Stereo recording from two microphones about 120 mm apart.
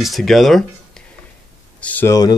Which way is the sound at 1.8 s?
10° left (ahead or behind).